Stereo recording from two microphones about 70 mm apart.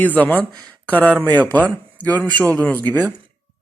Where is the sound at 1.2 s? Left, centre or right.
Left.